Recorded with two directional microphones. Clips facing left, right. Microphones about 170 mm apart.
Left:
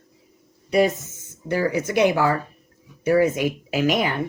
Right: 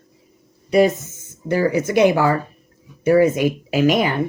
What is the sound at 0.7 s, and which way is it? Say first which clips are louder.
Speech: right 4 dB; 30° right (ahead or behind).